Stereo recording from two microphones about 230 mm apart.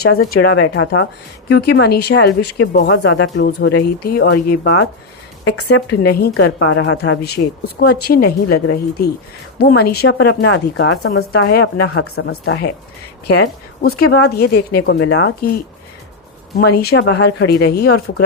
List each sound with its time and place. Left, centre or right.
0.0 s speech: left
6.0 s speech: left
12.1 s speech: left
13.2 s speech: left
14.9 s speech: left
16.6 s speech: left